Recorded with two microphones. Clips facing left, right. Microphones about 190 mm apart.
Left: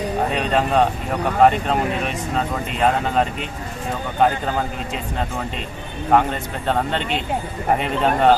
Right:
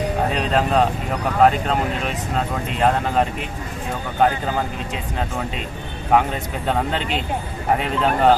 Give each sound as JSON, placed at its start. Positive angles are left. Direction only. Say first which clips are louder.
{"t": 0.3, "sound": "speech", "louder": "left 1 dB", "side_deg": 0}
{"t": 6.1, "sound": "speech", "louder": "left 1 dB", "side_deg": -5}